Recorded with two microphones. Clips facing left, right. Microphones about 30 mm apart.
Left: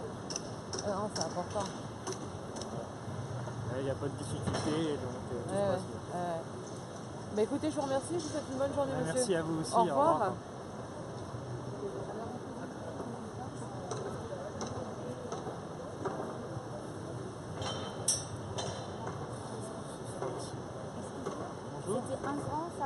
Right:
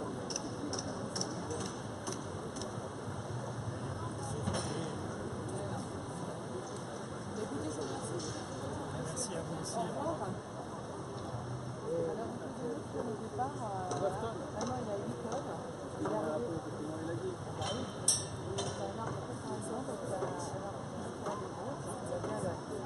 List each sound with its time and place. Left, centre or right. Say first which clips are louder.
7.3 s speech: left 9 dB; left
9.0 s speech: left 8 dB; left
9.8 s speech: left 11 dB; left